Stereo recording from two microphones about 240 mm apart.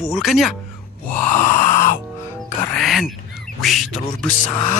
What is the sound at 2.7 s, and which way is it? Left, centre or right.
Speech, centre.